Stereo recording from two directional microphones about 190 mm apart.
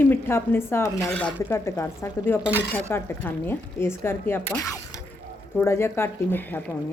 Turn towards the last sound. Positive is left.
turn(degrees=10)  # may be behind; listen again after turning